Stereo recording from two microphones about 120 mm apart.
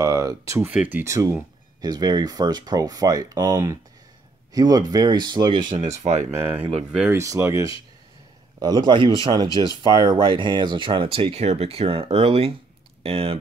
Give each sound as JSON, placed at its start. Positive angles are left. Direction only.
{"t": 0.0, "sound": "a sound", "side_deg": -30}
{"t": 0.6, "sound": "speech", "side_deg": -10}
{"t": 1.0, "sound": "speech", "side_deg": -25}
{"t": 5.8, "sound": "speech", "side_deg": -70}
{"t": 7.1, "sound": "speech", "side_deg": -25}
{"t": 8.5, "sound": "speech", "side_deg": -35}